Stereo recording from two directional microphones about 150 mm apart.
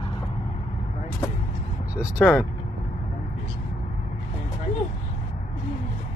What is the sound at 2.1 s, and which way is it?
Speech, 20° left (ahead or behind).